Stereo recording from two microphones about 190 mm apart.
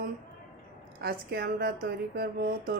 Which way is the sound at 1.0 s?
55° right (ahead or behind).